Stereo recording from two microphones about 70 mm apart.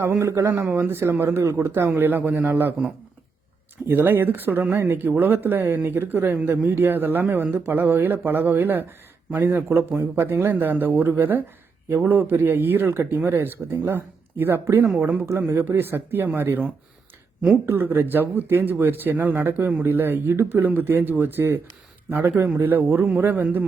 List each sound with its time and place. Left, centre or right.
0.2 s a man's voice: right
3.8 s a man's voice: right
15.4 s speech: right